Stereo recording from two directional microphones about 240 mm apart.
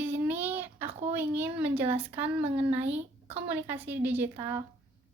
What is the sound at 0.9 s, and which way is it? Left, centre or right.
Speech, right.